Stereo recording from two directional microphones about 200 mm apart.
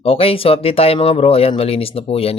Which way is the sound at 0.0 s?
30° left (ahead or behind).